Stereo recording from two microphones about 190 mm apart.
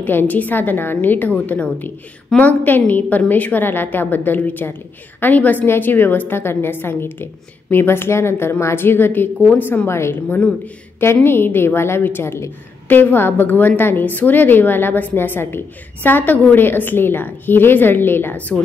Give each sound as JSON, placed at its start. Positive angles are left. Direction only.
{"t": 0.0, "sound": "a woman's voice", "side_deg": 10}